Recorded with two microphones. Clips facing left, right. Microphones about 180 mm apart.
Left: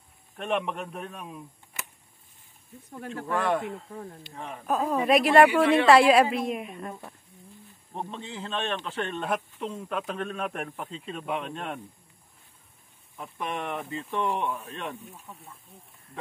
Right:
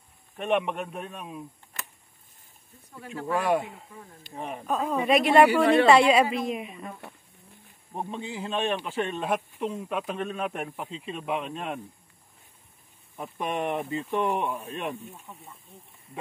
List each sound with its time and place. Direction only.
0.4 s speech: centre (ahead or behind)
3.3 s speech: 10° right (ahead or behind)
4.6 s speech: 5° left (ahead or behind)
13.1 s speech: 20° right (ahead or behind)
15.0 s speech: centre (ahead or behind)